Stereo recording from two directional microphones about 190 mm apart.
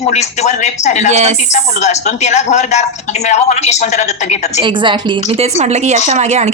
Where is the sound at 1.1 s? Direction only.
35° right (ahead or behind).